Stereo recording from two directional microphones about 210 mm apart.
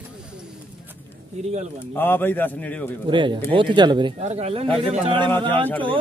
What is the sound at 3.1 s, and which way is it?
Speech, 20° right (ahead or behind).